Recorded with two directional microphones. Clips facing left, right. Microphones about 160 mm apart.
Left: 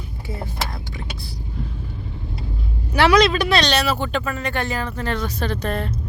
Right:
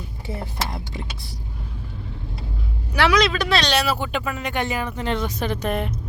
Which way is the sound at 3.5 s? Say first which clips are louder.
Left 2 dB; 5° right (ahead or behind).